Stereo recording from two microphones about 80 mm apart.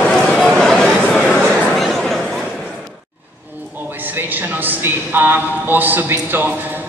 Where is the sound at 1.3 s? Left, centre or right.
Centre.